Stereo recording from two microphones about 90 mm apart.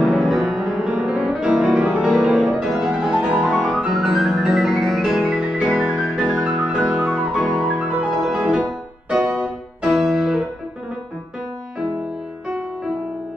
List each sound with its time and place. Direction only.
0.0 s music: 5° right (ahead or behind)
7.7 s music: 15° right (ahead or behind)
8.2 s music: 5° right (ahead or behind)
9.1 s keyboard: 10° right (ahead or behind)
12.4 s music: 10° right (ahead or behind)